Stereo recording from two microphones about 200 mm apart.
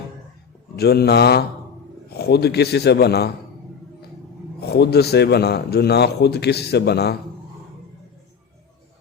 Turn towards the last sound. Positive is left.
turn(degrees=55)  # may be behind; listen again after turning